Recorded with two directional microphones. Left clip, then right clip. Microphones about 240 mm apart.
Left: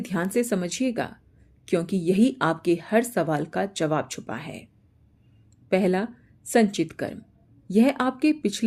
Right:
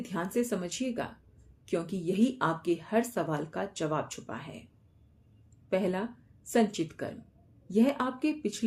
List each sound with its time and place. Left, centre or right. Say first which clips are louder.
0.0 s a woman's voice: left 6 dB; left
5.6 s a woman's voice: left 7 dB; left